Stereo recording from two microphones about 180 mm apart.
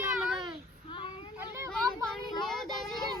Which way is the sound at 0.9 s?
25° left (ahead or behind).